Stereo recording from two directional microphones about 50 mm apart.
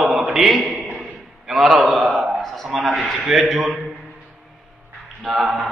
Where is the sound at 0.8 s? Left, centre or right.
Right.